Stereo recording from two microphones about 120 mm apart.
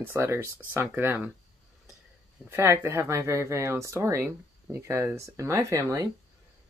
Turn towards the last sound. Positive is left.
turn(degrees=-25)  # may be behind; listen again after turning